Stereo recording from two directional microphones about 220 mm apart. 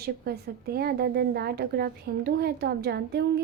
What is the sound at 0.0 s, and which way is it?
A woman's voice, 45° right (ahead or behind).